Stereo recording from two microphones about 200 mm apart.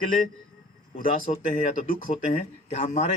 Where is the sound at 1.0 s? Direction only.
40° left (ahead or behind).